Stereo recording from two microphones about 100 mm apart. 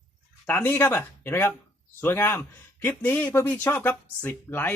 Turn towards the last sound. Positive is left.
turn(degrees=20)  # may be behind; listen again after turning